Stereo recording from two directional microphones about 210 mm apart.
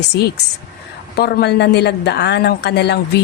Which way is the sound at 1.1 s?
50° left (ahead or behind).